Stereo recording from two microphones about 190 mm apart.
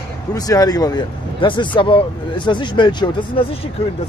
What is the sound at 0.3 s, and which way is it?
Speech, 20° left (ahead or behind).